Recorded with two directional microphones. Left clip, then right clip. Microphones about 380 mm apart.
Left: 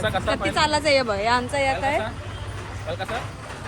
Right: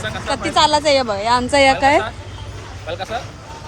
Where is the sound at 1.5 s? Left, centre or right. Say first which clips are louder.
Right 10 dB; right.